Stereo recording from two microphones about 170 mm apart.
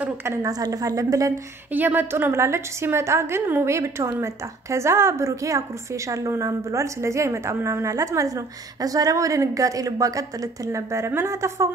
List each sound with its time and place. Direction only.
0.0 s a woman's voice: 15° right (ahead or behind)